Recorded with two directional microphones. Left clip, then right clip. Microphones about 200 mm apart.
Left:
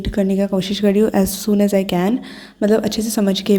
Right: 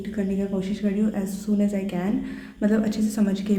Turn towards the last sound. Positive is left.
turn(degrees=40)  # may be behind; listen again after turning